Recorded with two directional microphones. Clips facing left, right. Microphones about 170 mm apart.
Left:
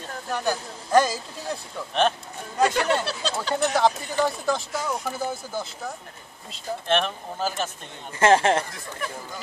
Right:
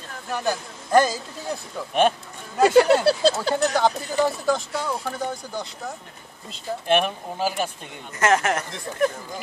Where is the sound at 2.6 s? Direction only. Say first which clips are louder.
Right 8 dB; 35° right (ahead or behind).